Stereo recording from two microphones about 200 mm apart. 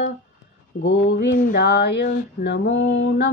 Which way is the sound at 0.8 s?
60° left (ahead or behind).